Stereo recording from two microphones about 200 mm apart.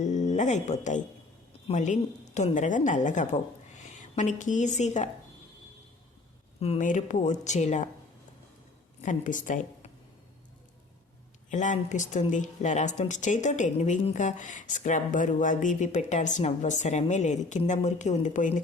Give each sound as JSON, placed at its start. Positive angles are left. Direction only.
{"t": 0.0, "sound": "a woman's voice", "side_deg": 35}
{"t": 6.6, "sound": "speech", "side_deg": 35}
{"t": 9.0, "sound": "a woman's voice", "side_deg": 40}
{"t": 11.5, "sound": "speech", "side_deg": 35}